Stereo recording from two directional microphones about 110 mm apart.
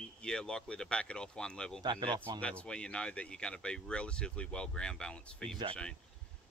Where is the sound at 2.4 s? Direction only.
10° left (ahead or behind).